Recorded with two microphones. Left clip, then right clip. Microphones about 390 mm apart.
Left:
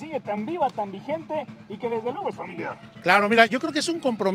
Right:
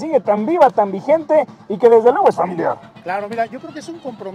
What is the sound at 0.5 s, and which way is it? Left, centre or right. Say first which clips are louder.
Speech: right 14 dB; right.